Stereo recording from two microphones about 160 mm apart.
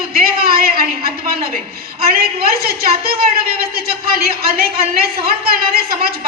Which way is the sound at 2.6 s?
75° right (ahead or behind).